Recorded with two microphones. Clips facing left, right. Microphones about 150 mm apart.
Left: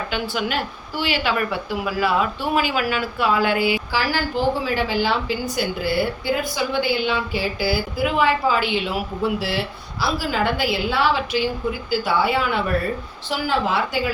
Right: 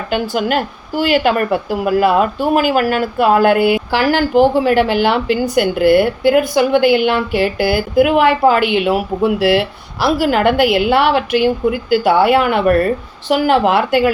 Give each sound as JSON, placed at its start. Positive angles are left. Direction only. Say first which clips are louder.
{"t": 0.1, "sound": "speech", "louder": "right 11 dB", "side_deg": -50}
{"t": 3.9, "sound": "speech", "louder": "right 10 dB", "side_deg": -65}